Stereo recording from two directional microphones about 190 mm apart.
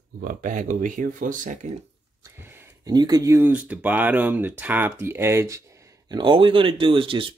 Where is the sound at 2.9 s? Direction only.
20° right (ahead or behind).